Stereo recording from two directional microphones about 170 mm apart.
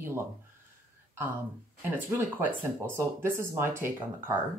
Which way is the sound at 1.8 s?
10° right (ahead or behind).